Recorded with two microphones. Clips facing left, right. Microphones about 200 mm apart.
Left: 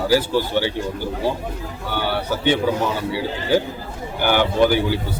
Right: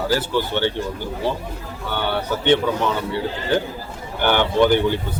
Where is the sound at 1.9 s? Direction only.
10° left (ahead or behind).